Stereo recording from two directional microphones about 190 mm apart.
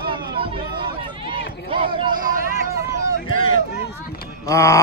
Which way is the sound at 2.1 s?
45° right (ahead or behind).